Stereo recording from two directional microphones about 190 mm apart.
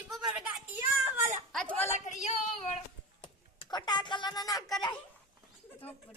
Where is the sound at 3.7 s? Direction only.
20° left (ahead or behind).